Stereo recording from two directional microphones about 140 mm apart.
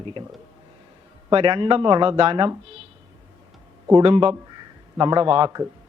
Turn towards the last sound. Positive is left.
turn(degrees=-30)  # may be behind; listen again after turning